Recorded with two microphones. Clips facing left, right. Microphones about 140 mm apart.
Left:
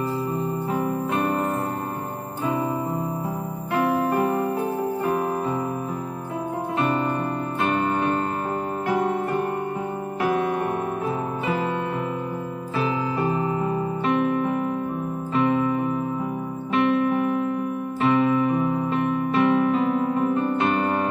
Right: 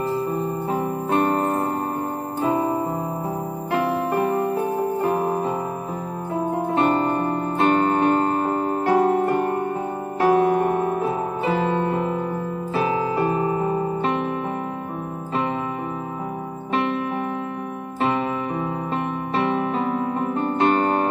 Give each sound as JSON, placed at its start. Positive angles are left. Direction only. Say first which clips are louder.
{"t": 0.7, "sound": "music", "louder": "right 1 dB", "side_deg": -35}
{"t": 3.7, "sound": "music", "louder": "even", "side_deg": -30}
{"t": 6.8, "sound": "music", "louder": "right 3 dB", "side_deg": -35}
{"t": 13.5, "sound": "music", "louder": "right 2 dB", "side_deg": -35}
{"t": 16.7, "sound": "music", "louder": "left 3 dB", "side_deg": -30}